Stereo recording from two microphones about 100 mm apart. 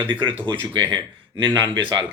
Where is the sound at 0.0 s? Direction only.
55° right (ahead or behind).